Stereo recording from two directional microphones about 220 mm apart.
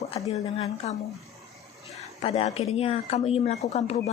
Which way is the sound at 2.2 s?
25° left (ahead or behind).